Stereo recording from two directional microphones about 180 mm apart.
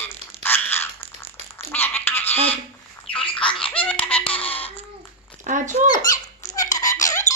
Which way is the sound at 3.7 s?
5° left (ahead or behind).